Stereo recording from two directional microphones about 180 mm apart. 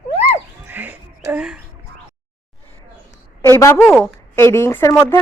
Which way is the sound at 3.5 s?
15° left (ahead or behind).